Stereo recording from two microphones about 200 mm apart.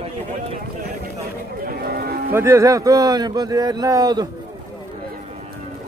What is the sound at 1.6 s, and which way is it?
Speech, 50° right (ahead or behind).